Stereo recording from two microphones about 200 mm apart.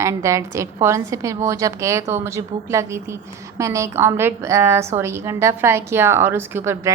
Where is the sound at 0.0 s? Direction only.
15° right (ahead or behind).